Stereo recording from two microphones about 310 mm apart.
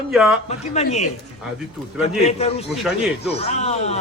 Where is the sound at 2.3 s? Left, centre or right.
Left.